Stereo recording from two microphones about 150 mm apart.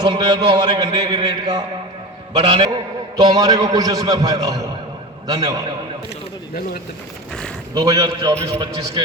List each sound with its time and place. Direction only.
0.0 s a man's voice: 30° right (ahead or behind)
7.7 s a man's voice: 25° right (ahead or behind)